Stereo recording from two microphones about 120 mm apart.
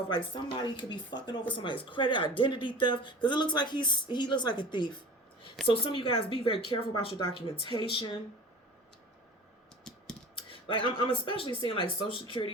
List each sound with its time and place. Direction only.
0.1 s a woman's voice: 40° left (ahead or behind)
10.5 s a sound: 45° left (ahead or behind)
11.3 s a woman's voice: 45° left (ahead or behind)